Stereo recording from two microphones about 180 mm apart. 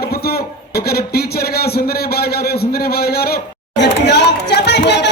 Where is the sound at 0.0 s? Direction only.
60° left (ahead or behind).